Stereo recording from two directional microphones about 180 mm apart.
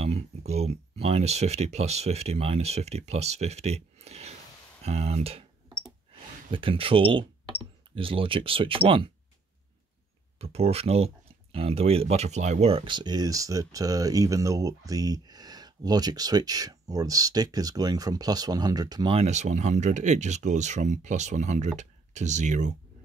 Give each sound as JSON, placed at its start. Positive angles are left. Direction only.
{"t": 0.5, "sound": "speech", "side_deg": -35}
{"t": 6.5, "sound": "speech", "side_deg": -30}
{"t": 10.4, "sound": "speech", "side_deg": -35}
{"t": 19.1, "sound": "speech", "side_deg": -40}